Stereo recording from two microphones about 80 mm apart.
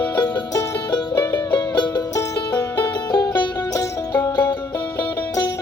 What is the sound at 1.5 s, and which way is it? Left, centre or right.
Music, left.